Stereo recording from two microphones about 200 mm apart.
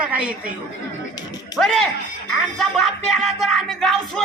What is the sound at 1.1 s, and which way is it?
Speech, 20° left (ahead or behind).